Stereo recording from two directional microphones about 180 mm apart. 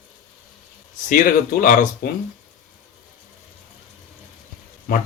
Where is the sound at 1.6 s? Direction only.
50° left (ahead or behind).